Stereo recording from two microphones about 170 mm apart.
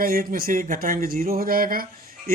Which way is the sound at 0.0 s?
55° right (ahead or behind).